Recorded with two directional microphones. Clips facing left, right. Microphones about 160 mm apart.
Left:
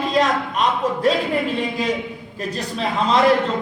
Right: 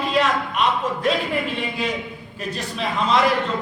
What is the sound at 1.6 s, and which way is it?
A man's voice, 40° left (ahead or behind).